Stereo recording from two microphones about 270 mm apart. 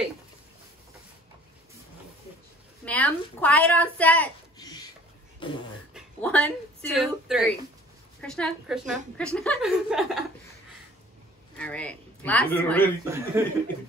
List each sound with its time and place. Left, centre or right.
2.8 s a woman's voice: centre
5.4 s beatboxing: centre
5.9 s a woman's voice: centre
11.5 s speech: centre
13.0 s a man's voice: centre